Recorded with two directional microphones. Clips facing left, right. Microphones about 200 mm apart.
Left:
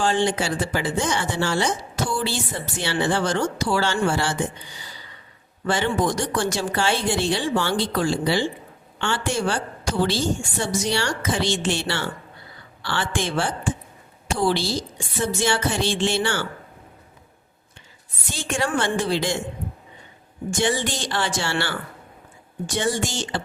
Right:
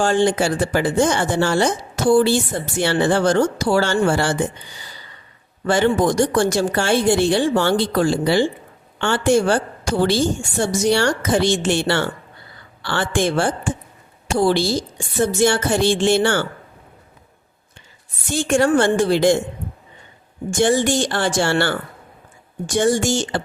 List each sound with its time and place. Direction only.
0.0 s speech: 45° right (ahead or behind)
5.6 s a woman's voice: 50° right (ahead or behind)
18.3 s speech: 50° right (ahead or behind)
20.5 s speech: 45° right (ahead or behind)